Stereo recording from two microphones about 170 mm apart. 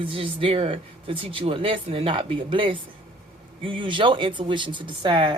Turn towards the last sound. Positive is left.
turn(degrees=-30)  # may be behind; listen again after turning